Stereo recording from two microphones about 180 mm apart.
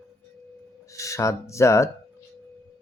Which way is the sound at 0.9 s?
15° left (ahead or behind).